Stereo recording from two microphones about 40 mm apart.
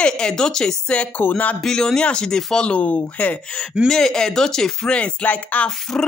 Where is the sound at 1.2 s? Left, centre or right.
Left.